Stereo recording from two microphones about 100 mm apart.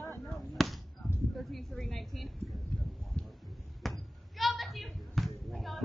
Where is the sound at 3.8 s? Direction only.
Centre (ahead or behind).